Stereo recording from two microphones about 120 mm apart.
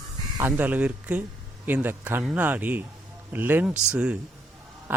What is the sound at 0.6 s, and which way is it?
A man's voice, 15° right (ahead or behind).